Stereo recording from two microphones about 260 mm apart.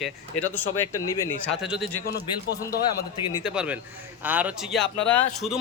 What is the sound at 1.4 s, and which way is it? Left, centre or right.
Speech, centre.